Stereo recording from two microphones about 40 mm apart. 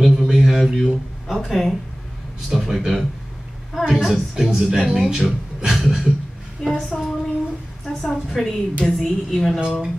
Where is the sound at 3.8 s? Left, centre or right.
Centre.